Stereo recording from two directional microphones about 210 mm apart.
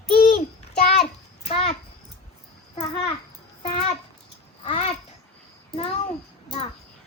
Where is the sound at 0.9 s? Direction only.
30° left (ahead or behind).